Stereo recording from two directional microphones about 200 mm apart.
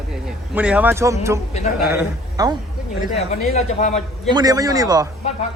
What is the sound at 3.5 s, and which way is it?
Speech, 35° left (ahead or behind).